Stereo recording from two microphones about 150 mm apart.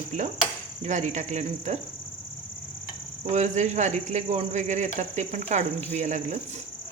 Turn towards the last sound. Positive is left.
turn(degrees=-50)  # may be behind; listen again after turning